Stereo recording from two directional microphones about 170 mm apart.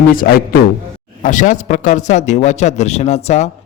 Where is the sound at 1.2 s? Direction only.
50° left (ahead or behind).